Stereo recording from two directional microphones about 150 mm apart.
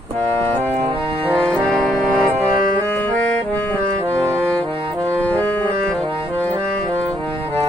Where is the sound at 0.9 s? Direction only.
40° right (ahead or behind).